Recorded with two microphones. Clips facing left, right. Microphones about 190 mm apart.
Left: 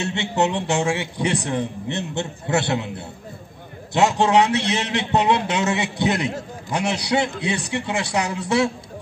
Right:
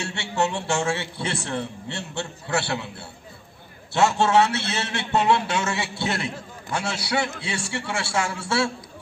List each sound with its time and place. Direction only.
0.0 s a man's voice: 20° left (ahead or behind)